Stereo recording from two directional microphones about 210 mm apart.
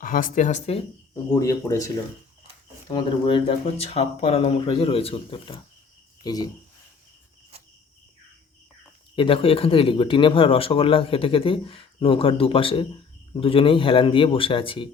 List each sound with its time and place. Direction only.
0.0 s speech: 40° left (ahead or behind)
1.3 s speech: 15° left (ahead or behind)
2.9 s speech: 25° left (ahead or behind)
9.1 s speech: 25° left (ahead or behind)